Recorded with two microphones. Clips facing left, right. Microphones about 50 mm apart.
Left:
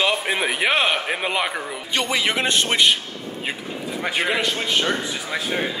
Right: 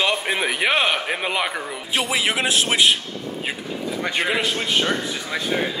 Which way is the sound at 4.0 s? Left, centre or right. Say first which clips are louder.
Left 1 dB; centre.